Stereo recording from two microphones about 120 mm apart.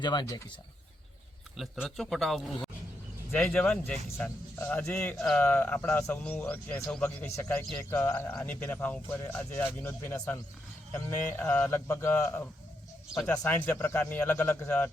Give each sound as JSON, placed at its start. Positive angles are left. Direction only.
{"t": 0.0, "sound": "speech", "side_deg": 35}
{"t": 1.5, "sound": "speech", "side_deg": 0}